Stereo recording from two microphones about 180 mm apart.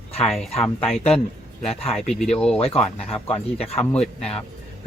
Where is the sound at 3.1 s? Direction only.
35° left (ahead or behind).